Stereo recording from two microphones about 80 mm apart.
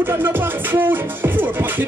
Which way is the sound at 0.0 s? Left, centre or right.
Right.